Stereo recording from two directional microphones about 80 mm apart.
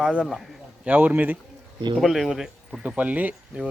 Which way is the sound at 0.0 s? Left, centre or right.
Centre.